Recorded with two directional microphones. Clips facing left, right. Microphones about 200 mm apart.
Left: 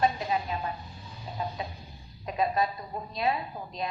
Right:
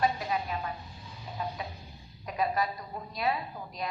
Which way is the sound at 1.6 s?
25° left (ahead or behind).